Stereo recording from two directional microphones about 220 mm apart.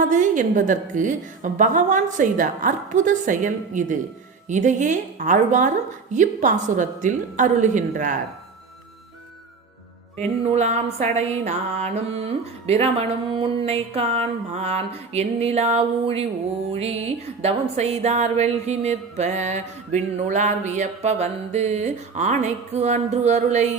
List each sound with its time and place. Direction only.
0.1 s music: 35° right (ahead or behind)
10.2 s a sound: 30° right (ahead or behind)
16.7 s music: 30° right (ahead or behind)